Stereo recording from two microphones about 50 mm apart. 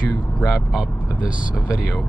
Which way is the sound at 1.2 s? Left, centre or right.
Right.